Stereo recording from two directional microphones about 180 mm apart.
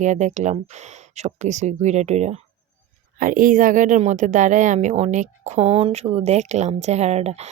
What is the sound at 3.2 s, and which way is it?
Speech, 50° right (ahead or behind).